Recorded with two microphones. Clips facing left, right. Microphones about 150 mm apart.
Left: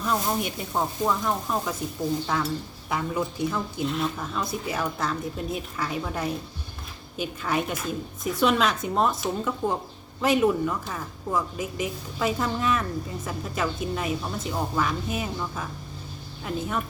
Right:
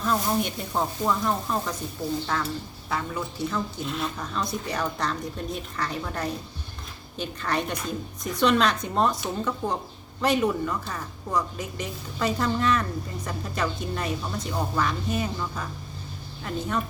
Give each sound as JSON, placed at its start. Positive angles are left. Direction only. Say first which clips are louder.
{"t": 0.0, "sound": "a woman's voice", "louder": "right 1 dB", "side_deg": 5}
{"t": 3.8, "sound": "a woman's voice", "louder": "left 3 dB", "side_deg": 0}